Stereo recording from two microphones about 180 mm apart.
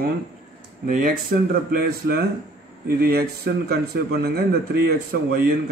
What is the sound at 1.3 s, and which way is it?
A man's voice, 50° right (ahead or behind).